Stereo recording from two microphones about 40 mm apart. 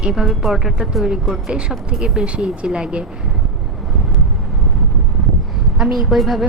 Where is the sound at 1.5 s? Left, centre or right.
Right.